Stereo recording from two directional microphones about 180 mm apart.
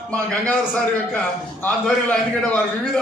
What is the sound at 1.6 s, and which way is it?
Speech, 10° left (ahead or behind).